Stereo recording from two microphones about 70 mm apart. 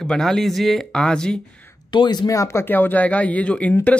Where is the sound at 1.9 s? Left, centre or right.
Left.